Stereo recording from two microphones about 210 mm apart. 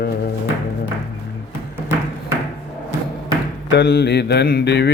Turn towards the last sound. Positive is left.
turn(degrees=50)  # may be behind; listen again after turning